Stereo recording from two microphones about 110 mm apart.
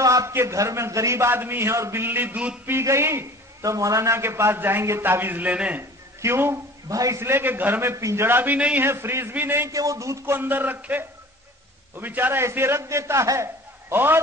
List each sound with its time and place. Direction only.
0.0 s a man's voice: 30° right (ahead or behind); by 5.9 s 15° right (ahead or behind)
6.2 s a man's voice: 25° right (ahead or behind)
9.7 s a man's voice: 30° right (ahead or behind)